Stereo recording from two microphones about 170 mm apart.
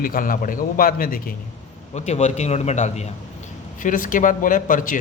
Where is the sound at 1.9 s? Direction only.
40° left (ahead or behind).